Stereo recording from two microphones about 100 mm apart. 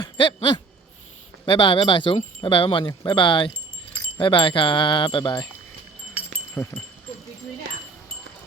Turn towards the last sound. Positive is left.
turn(degrees=25)  # may be behind; listen again after turning